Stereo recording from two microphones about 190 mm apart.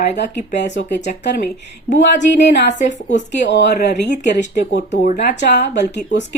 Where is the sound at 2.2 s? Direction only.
65° left (ahead or behind).